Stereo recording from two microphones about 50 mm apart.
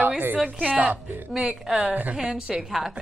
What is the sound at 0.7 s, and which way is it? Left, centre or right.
Speech, right.